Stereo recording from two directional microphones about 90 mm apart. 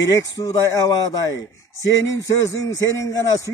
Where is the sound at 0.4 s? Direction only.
40° left (ahead or behind).